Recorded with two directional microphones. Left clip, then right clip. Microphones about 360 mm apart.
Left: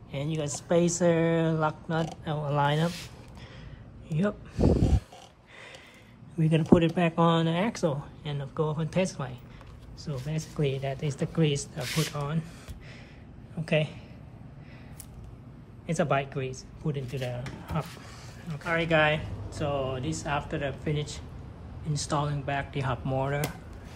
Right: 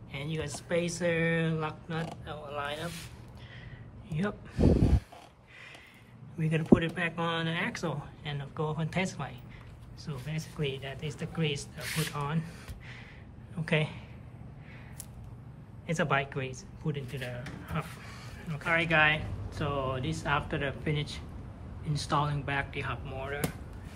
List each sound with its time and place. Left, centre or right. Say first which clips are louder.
0.1 s speech: left 4 dB; centre
2.2 s speech: left 12 dB; centre
6.3 s speech: left 3 dB; centre
13.7 s speech: left 3 dB; centre
15.9 s speech: left 2 dB; centre